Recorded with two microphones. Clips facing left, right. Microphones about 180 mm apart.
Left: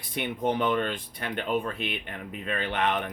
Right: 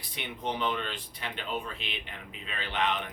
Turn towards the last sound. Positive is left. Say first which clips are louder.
# left 4 dB
turn(degrees=55)  # may be behind; listen again after turning